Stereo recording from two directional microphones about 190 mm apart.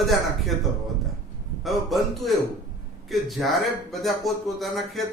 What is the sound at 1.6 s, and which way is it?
A man's voice, centre (ahead or behind).